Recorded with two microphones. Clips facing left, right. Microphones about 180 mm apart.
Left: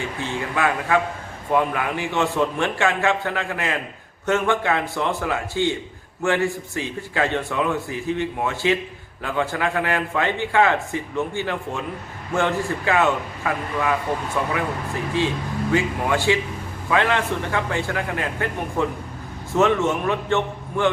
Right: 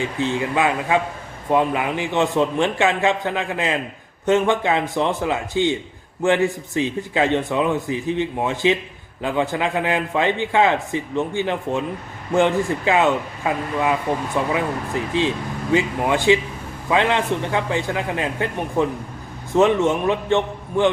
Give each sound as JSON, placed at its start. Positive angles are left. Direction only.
{"t": 0.0, "sound": "a man's voice", "side_deg": -15}